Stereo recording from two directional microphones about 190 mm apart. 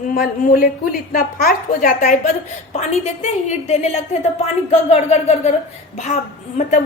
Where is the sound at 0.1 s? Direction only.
50° left (ahead or behind).